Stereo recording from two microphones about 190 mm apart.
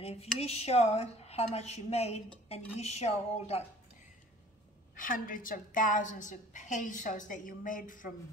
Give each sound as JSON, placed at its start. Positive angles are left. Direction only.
{"t": 0.0, "sound": "a woman's voice", "side_deg": 30}
{"t": 4.9, "sound": "a woman's voice", "side_deg": 45}